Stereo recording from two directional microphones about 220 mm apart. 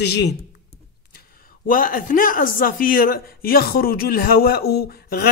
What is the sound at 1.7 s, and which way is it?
A man's voice, 40° left (ahead or behind).